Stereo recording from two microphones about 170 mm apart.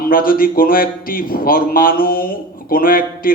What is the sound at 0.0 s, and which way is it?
A man's voice, 55° left (ahead or behind).